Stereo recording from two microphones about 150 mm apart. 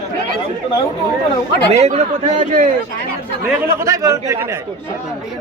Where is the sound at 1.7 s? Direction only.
45° right (ahead or behind).